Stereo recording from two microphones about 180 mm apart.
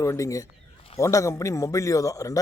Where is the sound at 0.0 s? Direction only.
15° left (ahead or behind).